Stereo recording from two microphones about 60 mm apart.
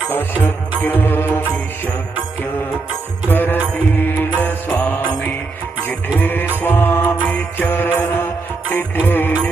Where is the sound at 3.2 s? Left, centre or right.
Left.